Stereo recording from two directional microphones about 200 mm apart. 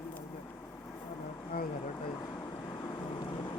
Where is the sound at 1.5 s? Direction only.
50° left (ahead or behind).